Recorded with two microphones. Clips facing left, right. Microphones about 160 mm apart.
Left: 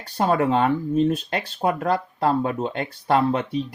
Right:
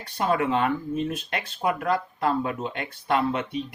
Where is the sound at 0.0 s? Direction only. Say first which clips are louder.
Left 4 dB; 35° left (ahead or behind).